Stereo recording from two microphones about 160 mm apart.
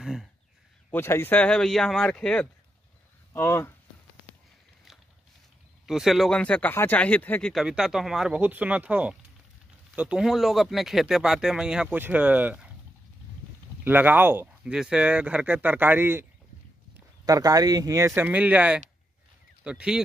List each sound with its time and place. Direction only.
0.0 s speech: 5° right (ahead or behind)
0.9 s speech: 15° left (ahead or behind)
3.3 s speech: 15° left (ahead or behind)
5.9 s speech: centre (ahead or behind)
7.5 s speech: 5° right (ahead or behind)
13.8 s speech: 10° right (ahead or behind)